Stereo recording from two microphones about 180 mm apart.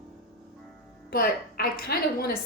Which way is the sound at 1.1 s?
55° left (ahead or behind).